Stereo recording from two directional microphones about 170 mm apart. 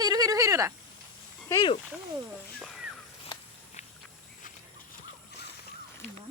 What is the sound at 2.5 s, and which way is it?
Speech, centre (ahead or behind).